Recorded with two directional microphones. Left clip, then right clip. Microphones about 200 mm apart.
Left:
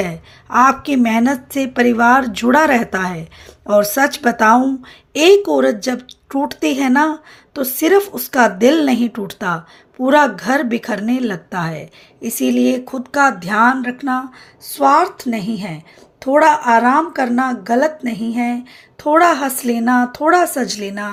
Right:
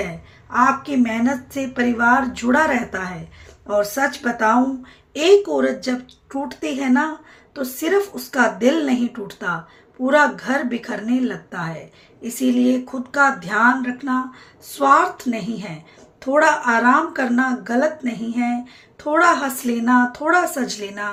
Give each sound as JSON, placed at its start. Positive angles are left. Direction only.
{"t": 0.5, "sound": "speech", "side_deg": 45}